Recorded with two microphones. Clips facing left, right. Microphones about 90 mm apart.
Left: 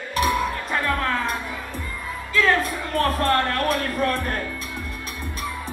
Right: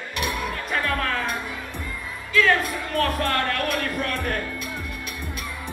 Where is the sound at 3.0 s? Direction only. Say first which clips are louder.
Left 3 dB; 35° left (ahead or behind).